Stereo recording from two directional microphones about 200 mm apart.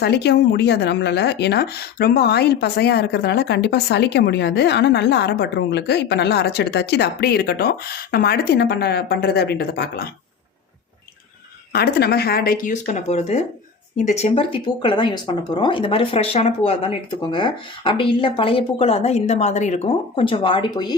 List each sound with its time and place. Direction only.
0.0 s speech: 55° left (ahead or behind)
11.7 s speech: 55° left (ahead or behind); by 20.9 s 20° left (ahead or behind)